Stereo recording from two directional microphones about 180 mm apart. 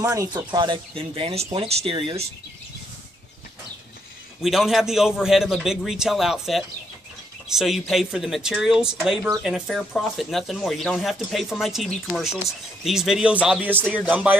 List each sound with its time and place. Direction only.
0.0 s speech: 20° right (ahead or behind)
4.4 s speech: centre (ahead or behind)